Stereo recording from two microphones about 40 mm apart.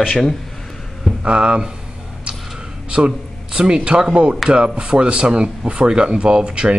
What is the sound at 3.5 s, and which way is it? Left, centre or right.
Speech, right.